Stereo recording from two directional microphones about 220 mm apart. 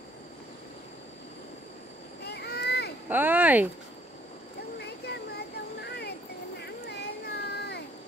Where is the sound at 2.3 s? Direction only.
45° left (ahead or behind).